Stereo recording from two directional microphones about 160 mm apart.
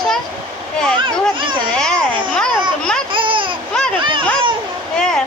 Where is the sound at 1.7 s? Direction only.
5° left (ahead or behind).